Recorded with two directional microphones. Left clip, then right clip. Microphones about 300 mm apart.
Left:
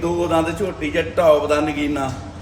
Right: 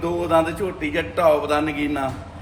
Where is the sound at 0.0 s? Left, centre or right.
Centre.